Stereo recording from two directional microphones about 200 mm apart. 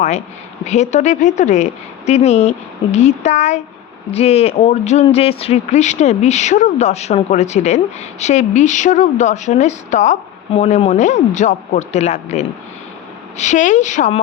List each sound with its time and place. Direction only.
0.6 s a woman's voice: 35° left (ahead or behind)